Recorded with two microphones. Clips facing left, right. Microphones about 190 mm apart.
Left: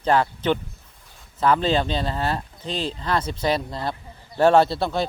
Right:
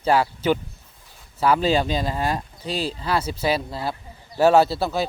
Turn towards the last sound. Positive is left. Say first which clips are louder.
# even
turn(degrees=-5)  # may be behind; listen again after turning